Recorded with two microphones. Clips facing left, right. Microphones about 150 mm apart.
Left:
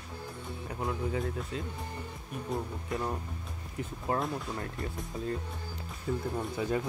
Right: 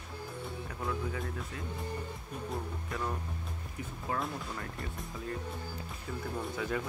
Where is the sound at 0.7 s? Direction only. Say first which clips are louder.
Left 4 dB; 25° left (ahead or behind).